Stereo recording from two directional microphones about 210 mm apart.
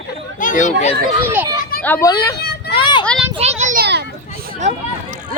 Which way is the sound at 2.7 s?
20° left (ahead or behind).